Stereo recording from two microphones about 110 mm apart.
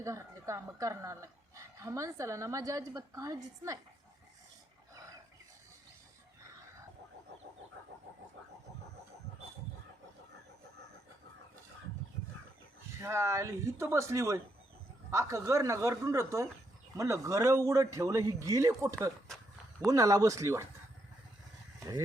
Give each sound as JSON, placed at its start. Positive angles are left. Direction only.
{"t": 0.0, "sound": "a woman's voice", "side_deg": -25}
{"t": 12.9, "sound": "a woman's voice", "side_deg": -25}